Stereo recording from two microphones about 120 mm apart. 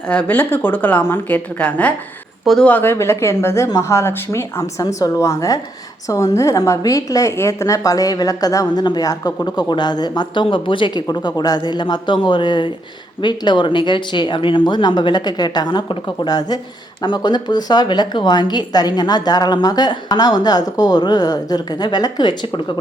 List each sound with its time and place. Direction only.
0.1 s speech: 15° left (ahead or behind)
2.4 s speech: centre (ahead or behind)
2.6 s a woman's voice: 15° left (ahead or behind); by 22.6 s 40° left (ahead or behind)